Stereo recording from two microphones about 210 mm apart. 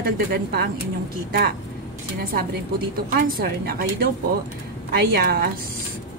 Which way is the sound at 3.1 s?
45° right (ahead or behind).